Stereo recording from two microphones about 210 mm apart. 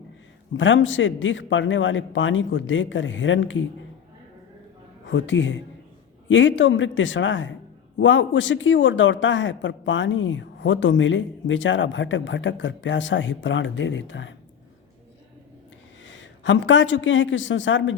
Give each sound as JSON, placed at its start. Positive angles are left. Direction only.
{"t": 0.5, "sound": "speech", "side_deg": 65}
{"t": 5.0, "sound": "speech", "side_deg": 65}
{"t": 16.0, "sound": "a man's voice", "side_deg": 60}